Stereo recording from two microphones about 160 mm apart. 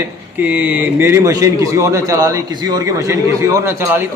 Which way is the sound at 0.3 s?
10° right (ahead or behind).